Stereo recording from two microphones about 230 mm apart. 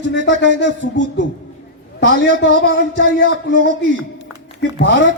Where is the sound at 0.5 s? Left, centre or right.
Right.